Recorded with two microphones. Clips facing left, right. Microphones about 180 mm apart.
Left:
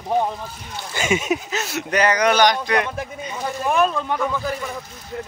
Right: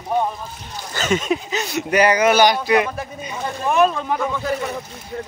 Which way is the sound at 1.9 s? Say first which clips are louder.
Right 3 dB; 10° right (ahead or behind).